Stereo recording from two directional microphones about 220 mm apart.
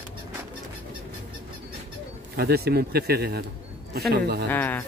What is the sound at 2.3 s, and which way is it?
Speech, 45° right (ahead or behind).